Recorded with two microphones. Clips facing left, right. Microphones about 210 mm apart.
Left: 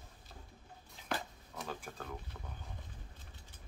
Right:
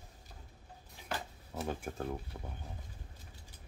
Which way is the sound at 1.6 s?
25° right (ahead or behind).